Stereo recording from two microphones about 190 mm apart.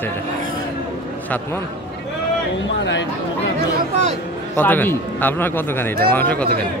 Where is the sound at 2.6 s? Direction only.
70° left (ahead or behind).